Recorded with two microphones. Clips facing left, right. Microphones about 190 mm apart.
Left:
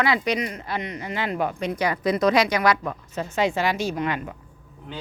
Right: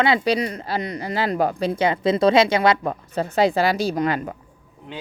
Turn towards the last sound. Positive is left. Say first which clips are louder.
# right 4 dB
turn(degrees=-40)  # may be behind; listen again after turning